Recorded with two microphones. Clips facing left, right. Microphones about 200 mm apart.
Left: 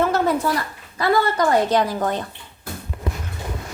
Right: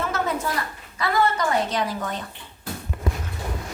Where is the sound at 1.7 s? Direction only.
40° left (ahead or behind).